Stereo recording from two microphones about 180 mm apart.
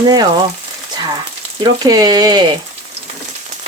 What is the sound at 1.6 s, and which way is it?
Speech, 20° right (ahead or behind).